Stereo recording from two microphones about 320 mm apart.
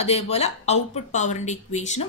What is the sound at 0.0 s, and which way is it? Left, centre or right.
A woman's voice, centre.